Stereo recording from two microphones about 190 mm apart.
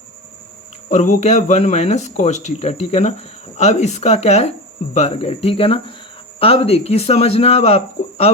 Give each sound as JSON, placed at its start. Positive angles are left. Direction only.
{"t": 0.9, "sound": "speech", "side_deg": 40}